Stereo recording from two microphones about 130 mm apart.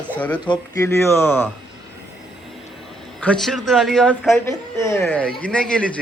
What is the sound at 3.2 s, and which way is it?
A man's voice, 5° left (ahead or behind).